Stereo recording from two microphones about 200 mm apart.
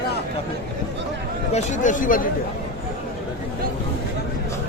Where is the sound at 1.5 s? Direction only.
40° left (ahead or behind).